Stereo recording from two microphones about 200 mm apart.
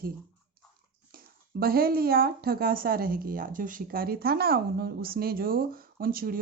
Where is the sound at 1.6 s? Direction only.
50° right (ahead or behind).